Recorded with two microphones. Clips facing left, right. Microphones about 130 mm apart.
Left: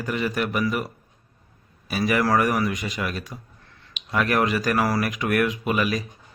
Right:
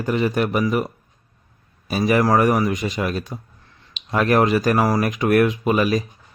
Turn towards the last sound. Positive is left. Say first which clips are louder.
# right 5 dB
turn(degrees=-30)  # may be behind; listen again after turning